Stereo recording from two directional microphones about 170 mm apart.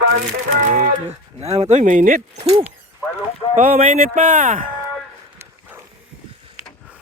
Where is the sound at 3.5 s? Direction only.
55° right (ahead or behind).